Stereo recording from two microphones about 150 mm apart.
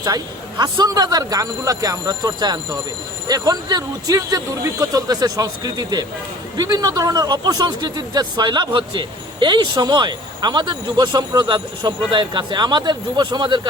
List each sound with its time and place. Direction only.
0.0 s speech: 25° right (ahead or behind)